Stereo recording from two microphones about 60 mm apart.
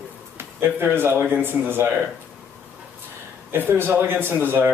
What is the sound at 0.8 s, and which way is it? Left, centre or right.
Speech, right.